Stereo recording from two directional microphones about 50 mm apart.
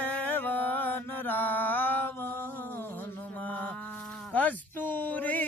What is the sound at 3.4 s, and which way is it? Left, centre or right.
Music, left.